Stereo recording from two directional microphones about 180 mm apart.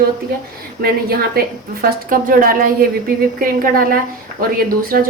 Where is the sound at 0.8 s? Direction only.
55° right (ahead or behind).